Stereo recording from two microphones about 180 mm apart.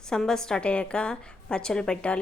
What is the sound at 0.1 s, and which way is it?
A woman's voice, 5° left (ahead or behind).